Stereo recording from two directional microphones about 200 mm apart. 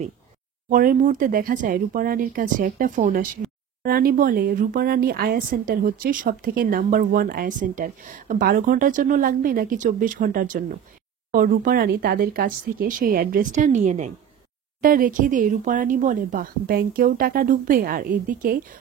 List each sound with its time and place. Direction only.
0.7 s speech: 45° right (ahead or behind)